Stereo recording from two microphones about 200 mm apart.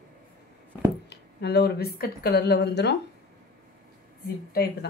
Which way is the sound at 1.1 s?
55° left (ahead or behind).